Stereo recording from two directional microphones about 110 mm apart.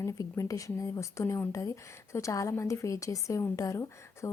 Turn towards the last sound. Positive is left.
turn(degrees=30)  # may be behind; listen again after turning